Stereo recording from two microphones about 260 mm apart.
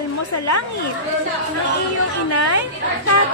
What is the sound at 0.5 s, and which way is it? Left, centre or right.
Speech, left.